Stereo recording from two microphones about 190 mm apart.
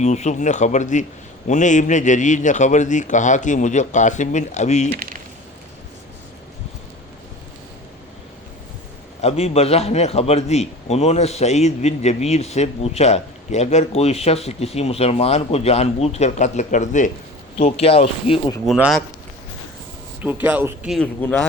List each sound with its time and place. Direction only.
0.0 s a man's voice: 35° left (ahead or behind)
9.2 s a man's voice: 30° left (ahead or behind)
18.6 s speech: centre (ahead or behind)
20.2 s speech: 10° right (ahead or behind)
20.9 s speech: 5° left (ahead or behind)